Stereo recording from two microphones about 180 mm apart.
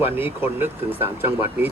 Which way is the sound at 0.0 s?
10° right (ahead or behind).